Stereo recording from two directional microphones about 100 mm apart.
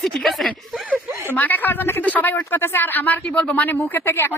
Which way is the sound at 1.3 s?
20° left (ahead or behind).